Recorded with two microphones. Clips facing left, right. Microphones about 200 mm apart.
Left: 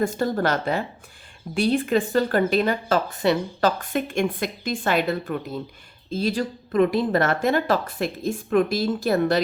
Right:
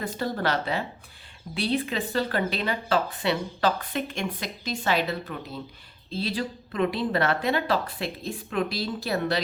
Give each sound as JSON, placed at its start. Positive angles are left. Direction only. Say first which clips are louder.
{"t": 0.0, "sound": "speech", "louder": "left 6 dB", "side_deg": 45}